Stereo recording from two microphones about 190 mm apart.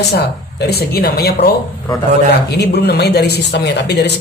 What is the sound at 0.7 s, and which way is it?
Speech, 55° left (ahead or behind).